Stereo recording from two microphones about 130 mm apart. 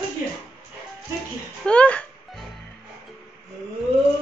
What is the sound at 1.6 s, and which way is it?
Speech, 10° left (ahead or behind).